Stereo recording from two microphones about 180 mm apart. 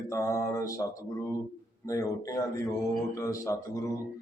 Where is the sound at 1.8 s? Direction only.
20° left (ahead or behind).